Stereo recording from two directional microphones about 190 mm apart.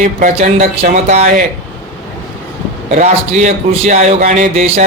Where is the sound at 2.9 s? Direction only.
40° right (ahead or behind).